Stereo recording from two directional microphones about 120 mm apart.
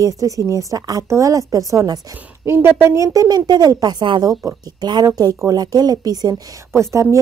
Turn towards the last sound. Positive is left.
turn(degrees=-30)  # may be behind; listen again after turning